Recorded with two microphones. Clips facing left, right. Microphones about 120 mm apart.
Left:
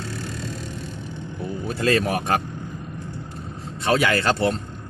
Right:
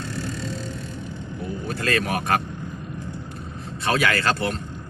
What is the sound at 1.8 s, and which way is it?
Speech, 25° left (ahead or behind).